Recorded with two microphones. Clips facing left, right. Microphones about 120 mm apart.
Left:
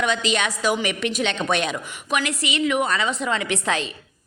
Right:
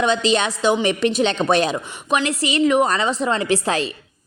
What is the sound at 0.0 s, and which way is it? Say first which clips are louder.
A woman's voice: right 4 dB; 30° right (ahead or behind).